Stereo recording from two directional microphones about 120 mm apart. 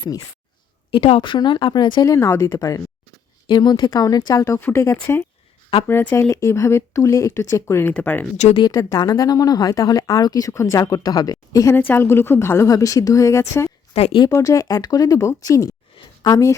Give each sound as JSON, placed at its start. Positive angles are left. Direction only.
{"t": 0.9, "sound": "speech", "side_deg": 50}
{"t": 2.1, "sound": "a woman's voice", "side_deg": 25}
{"t": 8.5, "sound": "speech", "side_deg": 40}
{"t": 11.7, "sound": "a woman's voice", "side_deg": 20}
{"t": 13.9, "sound": "speech", "side_deg": 60}
{"t": 14.3, "sound": "a woman's voice", "side_deg": 30}